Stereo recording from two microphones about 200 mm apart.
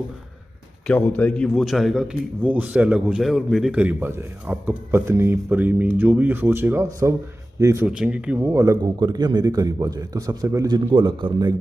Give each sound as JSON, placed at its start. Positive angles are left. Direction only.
{"t": 0.8, "sound": "a man's voice", "side_deg": 5}